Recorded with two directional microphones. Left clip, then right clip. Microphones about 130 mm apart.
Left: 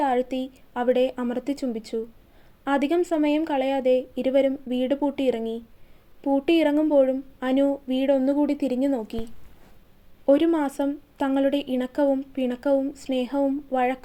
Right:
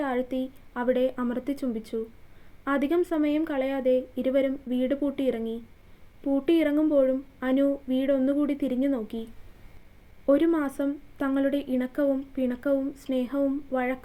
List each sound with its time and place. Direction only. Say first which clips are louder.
0.0 s speech: left 5 dB; 25° left (ahead or behind)
10.2 s speech: left 3 dB; 30° left (ahead or behind)